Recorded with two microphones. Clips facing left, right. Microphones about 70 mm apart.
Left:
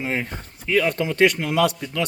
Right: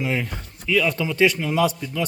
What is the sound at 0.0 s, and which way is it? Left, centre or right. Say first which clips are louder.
Speech: right 1 dB; left.